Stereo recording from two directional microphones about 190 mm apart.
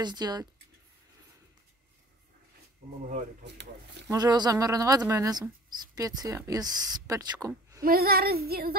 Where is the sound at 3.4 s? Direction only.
65° right (ahead or behind).